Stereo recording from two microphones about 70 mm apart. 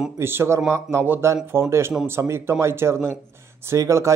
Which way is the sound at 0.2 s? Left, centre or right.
Right.